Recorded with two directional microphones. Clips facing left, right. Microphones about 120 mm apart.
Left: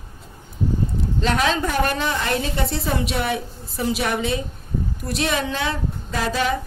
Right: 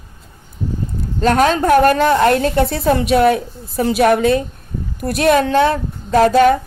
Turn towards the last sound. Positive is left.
turn(degrees=-50)  # may be behind; listen again after turning